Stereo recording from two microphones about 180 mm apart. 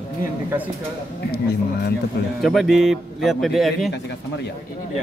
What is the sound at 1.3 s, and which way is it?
Speech, 60° left (ahead or behind).